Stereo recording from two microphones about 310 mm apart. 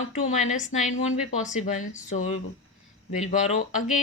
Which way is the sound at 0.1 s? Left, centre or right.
Left.